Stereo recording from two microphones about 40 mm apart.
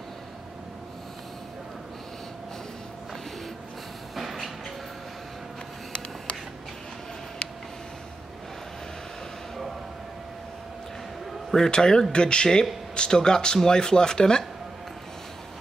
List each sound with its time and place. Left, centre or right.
4.1 s train: centre
11.5 s speech: centre